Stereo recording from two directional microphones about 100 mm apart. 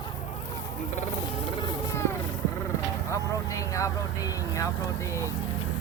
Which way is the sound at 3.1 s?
30° left (ahead or behind).